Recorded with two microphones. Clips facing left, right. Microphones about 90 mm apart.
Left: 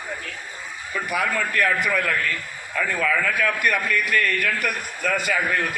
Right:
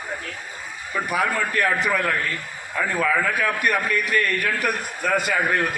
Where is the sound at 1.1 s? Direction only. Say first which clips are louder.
Right 1 dB; 30° right (ahead or behind).